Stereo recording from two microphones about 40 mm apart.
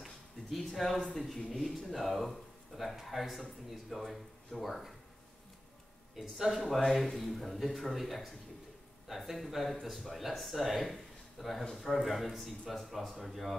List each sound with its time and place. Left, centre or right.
0.0 s speech: centre
6.3 s speech: centre
6.6 s speech: centre